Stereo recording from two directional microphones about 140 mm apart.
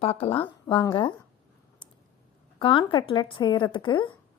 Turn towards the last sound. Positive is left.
turn(degrees=35)  # may be behind; listen again after turning